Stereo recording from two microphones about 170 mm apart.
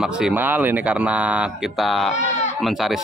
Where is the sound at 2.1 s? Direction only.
45° left (ahead or behind).